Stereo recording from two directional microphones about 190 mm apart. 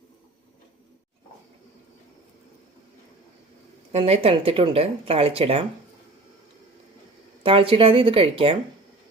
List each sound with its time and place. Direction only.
3.9 s speech: 30° right (ahead or behind)
7.4 s speech: 30° right (ahead or behind)